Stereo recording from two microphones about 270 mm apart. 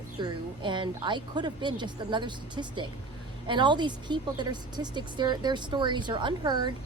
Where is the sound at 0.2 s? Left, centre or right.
Centre.